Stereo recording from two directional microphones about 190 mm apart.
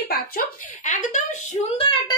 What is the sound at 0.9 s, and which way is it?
Speech, 40° left (ahead or behind).